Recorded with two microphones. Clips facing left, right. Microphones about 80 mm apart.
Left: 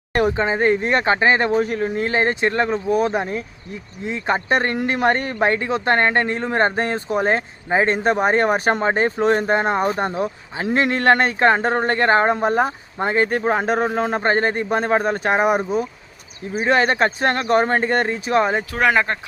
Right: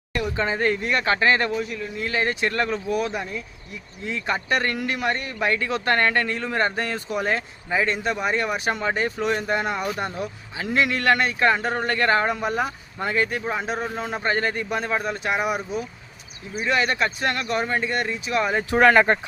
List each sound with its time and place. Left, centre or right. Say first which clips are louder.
0.1 s a sound: left 9 dB; left
0.3 s speech: left 5 dB; left
1.5 s a man's voice: left 8 dB; left
2.0 s speech: left 2 dB; left
18.8 s speech: right 2 dB; centre